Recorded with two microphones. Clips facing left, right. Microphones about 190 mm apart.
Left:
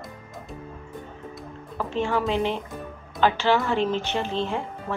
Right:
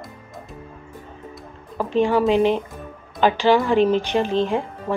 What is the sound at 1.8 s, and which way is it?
A woman's voice, 15° right (ahead or behind).